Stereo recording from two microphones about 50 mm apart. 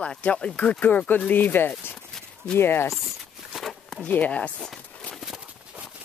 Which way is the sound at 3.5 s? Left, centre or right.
Centre.